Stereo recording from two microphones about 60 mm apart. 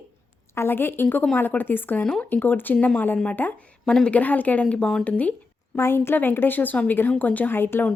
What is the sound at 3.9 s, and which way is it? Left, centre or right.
Speech, centre.